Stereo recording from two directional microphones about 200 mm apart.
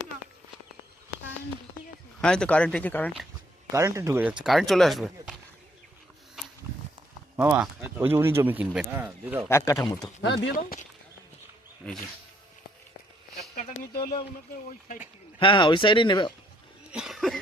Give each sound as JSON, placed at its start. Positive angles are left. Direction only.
{"t": 2.2, "sound": "speech", "side_deg": 5}
{"t": 3.7, "sound": "speech", "side_deg": -15}
{"t": 4.4, "sound": "speech", "side_deg": 0}
{"t": 7.3, "sound": "speech", "side_deg": -5}
{"t": 9.5, "sound": "speech", "side_deg": 15}
{"t": 10.2, "sound": "speech", "side_deg": 60}
{"t": 13.6, "sound": "a sound", "side_deg": 45}
{"t": 15.4, "sound": "speech", "side_deg": 25}
{"t": 16.9, "sound": "cough", "side_deg": 0}